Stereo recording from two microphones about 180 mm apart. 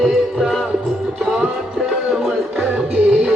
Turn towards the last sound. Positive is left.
turn(degrees=-5)  # may be behind; listen again after turning